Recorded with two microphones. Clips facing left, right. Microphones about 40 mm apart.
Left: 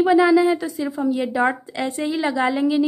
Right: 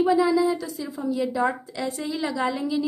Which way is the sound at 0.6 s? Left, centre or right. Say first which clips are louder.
Left 7 dB; left.